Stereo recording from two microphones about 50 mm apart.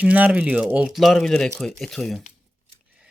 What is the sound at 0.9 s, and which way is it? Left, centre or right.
Speech, centre.